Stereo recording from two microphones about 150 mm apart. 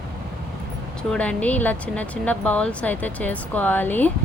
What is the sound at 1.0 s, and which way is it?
Speech, 5° left (ahead or behind).